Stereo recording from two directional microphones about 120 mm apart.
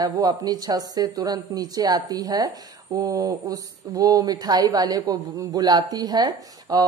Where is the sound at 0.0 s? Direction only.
35° right (ahead or behind).